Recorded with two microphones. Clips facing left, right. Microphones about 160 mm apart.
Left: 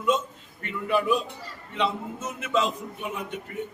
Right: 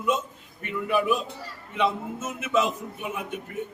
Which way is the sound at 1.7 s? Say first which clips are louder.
Right 2 dB; 10° right (ahead or behind).